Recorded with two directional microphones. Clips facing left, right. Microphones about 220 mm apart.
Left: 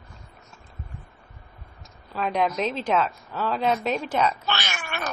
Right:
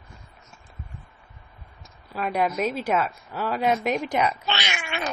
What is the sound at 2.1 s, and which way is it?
A woman's voice, 5° right (ahead or behind).